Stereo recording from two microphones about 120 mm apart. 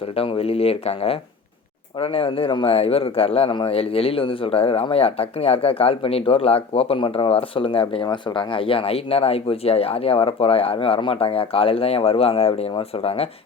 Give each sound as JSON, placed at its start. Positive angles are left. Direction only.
{"t": 0.2, "sound": "speech", "side_deg": 55}